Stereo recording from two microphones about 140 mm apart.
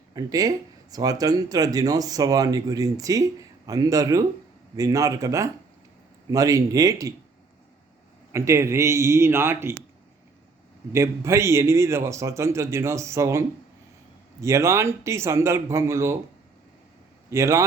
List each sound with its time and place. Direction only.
0.1 s speech: 25° right (ahead or behind)
8.3 s speech: 20° right (ahead or behind)
10.9 s speech: 20° right (ahead or behind)
14.4 s speech: 20° right (ahead or behind)
17.2 s speech: 20° right (ahead or behind)